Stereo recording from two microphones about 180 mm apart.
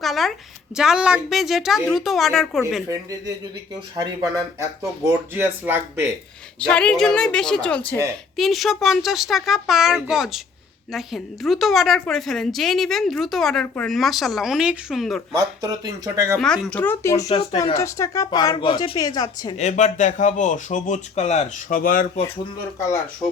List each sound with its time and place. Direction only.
0.0 s a woman's voice: centre (ahead or behind)
2.9 s speech: 20° right (ahead or behind)
5.0 s speech: 10° right (ahead or behind)
6.6 s a woman's voice: 5° left (ahead or behind)
15.4 s speech: 20° right (ahead or behind)
16.4 s speech: 5° left (ahead or behind)
17.2 s speech: 30° left (ahead or behind)
17.6 s speech: 20° left (ahead or behind)
19.5 s speech: 40° left (ahead or behind)